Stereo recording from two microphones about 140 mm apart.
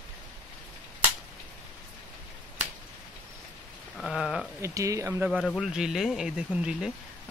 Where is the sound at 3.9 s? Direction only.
Centre (ahead or behind).